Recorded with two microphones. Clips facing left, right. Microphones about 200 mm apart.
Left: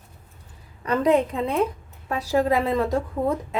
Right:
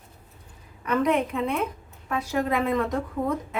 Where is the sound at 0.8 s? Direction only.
35° left (ahead or behind).